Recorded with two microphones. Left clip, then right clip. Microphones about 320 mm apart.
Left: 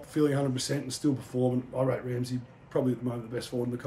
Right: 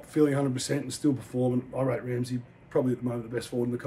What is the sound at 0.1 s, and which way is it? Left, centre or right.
Speech, centre.